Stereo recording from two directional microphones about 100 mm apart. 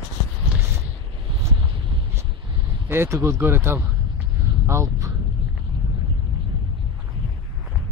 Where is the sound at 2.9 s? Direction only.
25° right (ahead or behind).